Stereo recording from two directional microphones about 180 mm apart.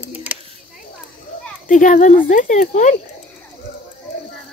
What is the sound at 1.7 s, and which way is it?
Speech, 45° left (ahead or behind).